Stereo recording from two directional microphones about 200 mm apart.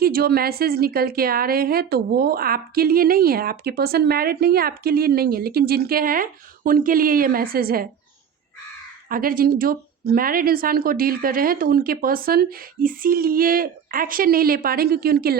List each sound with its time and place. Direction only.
0.0 s a woman's voice: 50° right (ahead or behind)
9.0 s a woman's voice: 45° right (ahead or behind)